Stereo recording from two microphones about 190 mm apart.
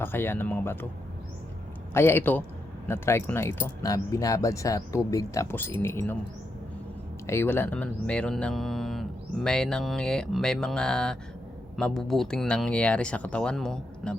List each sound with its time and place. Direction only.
0.0 s speech: 10° left (ahead or behind)
1.9 s speech: 10° left (ahead or behind)
7.3 s speech: 10° left (ahead or behind)